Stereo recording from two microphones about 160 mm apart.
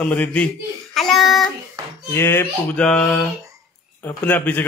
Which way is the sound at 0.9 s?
Centre (ahead or behind).